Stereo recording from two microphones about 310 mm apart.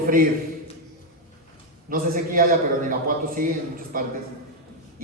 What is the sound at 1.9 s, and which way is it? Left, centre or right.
Speech, right.